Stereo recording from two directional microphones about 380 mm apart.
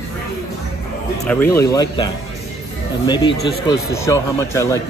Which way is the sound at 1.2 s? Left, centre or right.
Centre.